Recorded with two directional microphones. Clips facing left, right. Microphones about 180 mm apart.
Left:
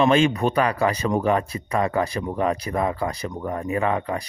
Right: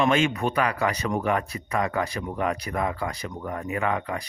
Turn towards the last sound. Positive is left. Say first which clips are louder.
# left 4 dB
turn(degrees=30)  # may be behind; listen again after turning